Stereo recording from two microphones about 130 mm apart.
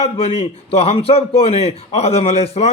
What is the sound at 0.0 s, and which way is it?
A man's voice, 50° left (ahead or behind).